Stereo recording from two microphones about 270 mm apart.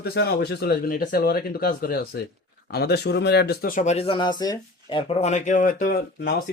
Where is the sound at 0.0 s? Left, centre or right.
Left.